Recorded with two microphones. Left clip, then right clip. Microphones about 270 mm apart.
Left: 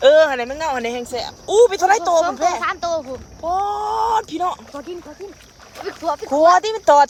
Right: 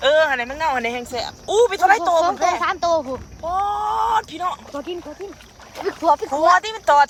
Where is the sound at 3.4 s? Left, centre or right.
Centre.